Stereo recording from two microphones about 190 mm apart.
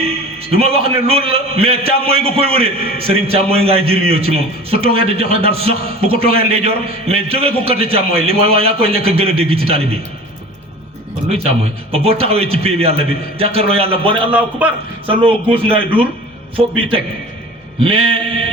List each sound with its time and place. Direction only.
0.0 s a man's voice: 30° right (ahead or behind)
11.3 s a man's voice: 30° right (ahead or behind)
14.3 s a man's voice: 5° right (ahead or behind)
15.2 s a man's voice: 30° right (ahead or behind)
17.7 s a man's voice: 30° right (ahead or behind)